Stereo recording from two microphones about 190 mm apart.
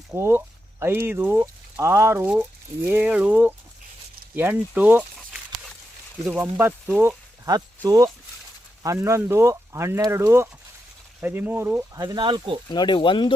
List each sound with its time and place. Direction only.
0.1 s speech: 10° right (ahead or behind)
12.0 s speech: 25° right (ahead or behind)
12.6 s speech: 25° left (ahead or behind)